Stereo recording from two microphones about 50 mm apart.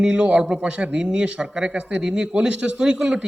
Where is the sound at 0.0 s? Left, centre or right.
Centre.